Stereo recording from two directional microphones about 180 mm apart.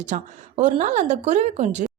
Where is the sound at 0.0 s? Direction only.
40° right (ahead or behind).